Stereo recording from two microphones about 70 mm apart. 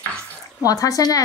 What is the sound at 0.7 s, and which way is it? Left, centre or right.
Speech, left.